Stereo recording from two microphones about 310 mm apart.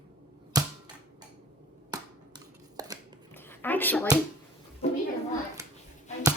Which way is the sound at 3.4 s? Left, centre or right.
Centre.